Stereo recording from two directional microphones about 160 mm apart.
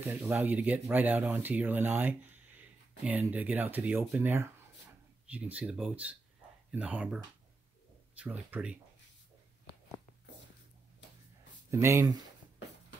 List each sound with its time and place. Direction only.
0.0 s speech: 10° right (ahead or behind)
8.2 s speech: 10° right (ahead or behind)
11.7 s speech: 20° right (ahead or behind)